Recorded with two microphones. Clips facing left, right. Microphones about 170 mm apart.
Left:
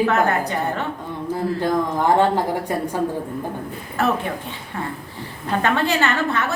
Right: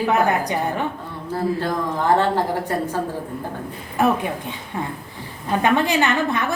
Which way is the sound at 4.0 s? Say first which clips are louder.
Right 2 dB; 15° right (ahead or behind).